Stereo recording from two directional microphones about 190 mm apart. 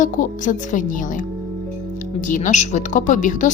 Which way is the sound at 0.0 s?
40° left (ahead or behind).